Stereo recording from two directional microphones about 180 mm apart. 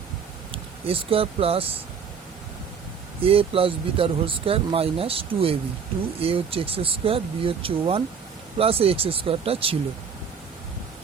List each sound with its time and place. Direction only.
0.5 s speech: 30° right (ahead or behind)
3.2 s speech: 30° right (ahead or behind)